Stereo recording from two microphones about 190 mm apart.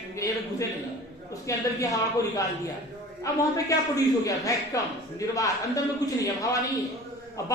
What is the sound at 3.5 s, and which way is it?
A man's voice, 15° left (ahead or behind).